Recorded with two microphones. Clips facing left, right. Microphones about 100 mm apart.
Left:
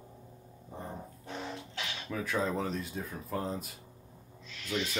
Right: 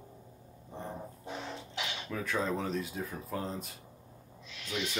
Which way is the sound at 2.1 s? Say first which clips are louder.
Left 1 dB; centre (ahead or behind).